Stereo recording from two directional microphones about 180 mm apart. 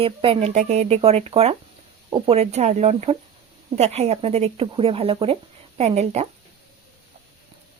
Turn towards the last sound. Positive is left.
turn(degrees=-35)  # may be behind; listen again after turning